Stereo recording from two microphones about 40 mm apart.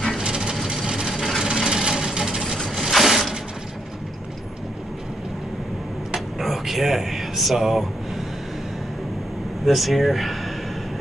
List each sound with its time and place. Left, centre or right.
0.2 s a sound: centre
0.8 s vehicle: centre
1.4 s engine: centre
2.7 s a sound: centre
6.4 s speech: centre
9.7 s speech: centre